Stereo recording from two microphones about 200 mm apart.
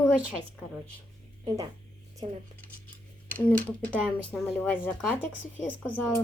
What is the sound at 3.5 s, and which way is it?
Speech, 5° left (ahead or behind).